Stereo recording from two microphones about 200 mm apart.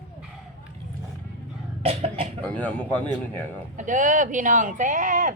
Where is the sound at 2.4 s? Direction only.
5° left (ahead or behind).